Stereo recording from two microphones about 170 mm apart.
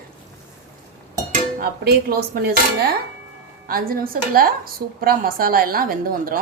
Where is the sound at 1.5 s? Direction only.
70° right (ahead or behind).